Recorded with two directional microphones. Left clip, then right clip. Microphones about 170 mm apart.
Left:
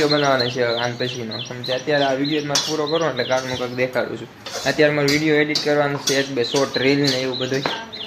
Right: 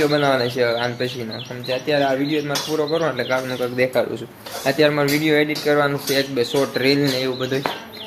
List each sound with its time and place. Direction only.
0.0 s speech: 15° right (ahead or behind)